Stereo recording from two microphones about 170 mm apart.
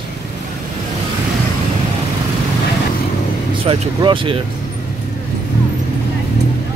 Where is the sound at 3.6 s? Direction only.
30° right (ahead or behind).